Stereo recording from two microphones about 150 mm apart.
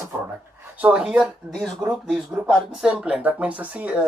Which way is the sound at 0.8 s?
5° right (ahead or behind).